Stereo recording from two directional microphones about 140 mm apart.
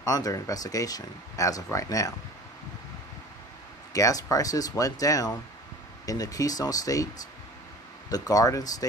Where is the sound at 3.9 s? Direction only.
25° left (ahead or behind).